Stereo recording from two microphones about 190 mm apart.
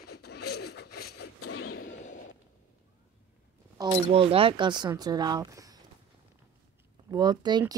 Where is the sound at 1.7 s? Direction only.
40° left (ahead or behind).